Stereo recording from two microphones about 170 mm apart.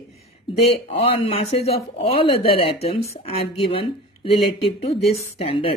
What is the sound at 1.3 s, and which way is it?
Speech, 35° left (ahead or behind).